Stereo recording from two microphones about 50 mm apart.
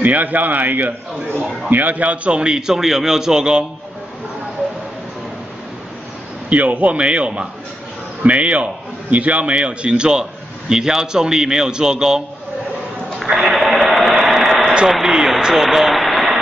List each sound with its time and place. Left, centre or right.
0.0 s a man's voice: right; by 3.6 s centre
6.5 s a man's voice: right; by 12.2 s centre
13.3 s a sound: centre
14.9 s speech: centre